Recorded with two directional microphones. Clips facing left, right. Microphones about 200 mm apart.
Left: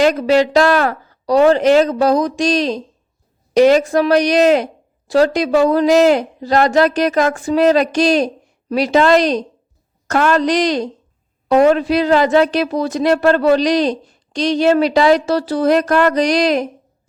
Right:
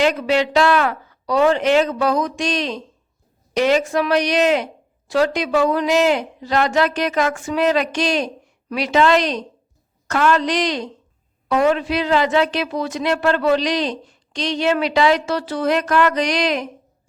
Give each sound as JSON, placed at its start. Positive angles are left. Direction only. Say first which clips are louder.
{"t": 0.0, "sound": "speech", "louder": "left 5 dB", "side_deg": 40}